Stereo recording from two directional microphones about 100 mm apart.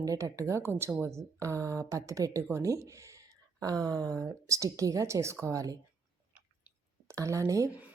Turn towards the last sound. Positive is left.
turn(degrees=-35)  # may be behind; listen again after turning